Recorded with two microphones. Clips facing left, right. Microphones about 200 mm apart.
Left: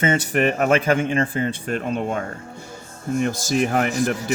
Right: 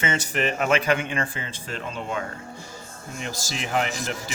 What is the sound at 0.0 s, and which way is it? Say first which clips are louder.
Speech: left 6 dB; 50° left (ahead or behind).